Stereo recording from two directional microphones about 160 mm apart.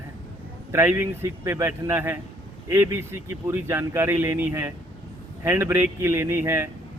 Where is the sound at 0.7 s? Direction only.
15° right (ahead or behind).